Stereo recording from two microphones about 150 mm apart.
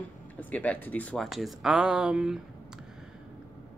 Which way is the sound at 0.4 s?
10° left (ahead or behind).